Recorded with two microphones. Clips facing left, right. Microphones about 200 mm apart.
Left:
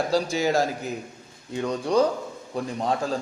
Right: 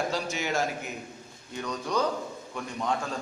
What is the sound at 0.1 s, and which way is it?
A man's voice, 35° left (ahead or behind).